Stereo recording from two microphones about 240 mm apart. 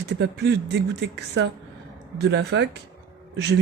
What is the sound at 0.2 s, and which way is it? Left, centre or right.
Speech, right.